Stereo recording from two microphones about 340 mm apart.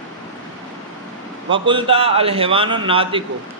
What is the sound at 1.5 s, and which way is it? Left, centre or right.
A man's voice, centre.